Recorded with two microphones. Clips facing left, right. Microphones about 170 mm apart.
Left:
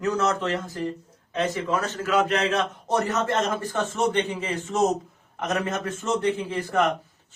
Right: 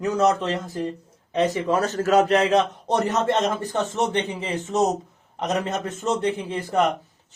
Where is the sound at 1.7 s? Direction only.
35° right (ahead or behind).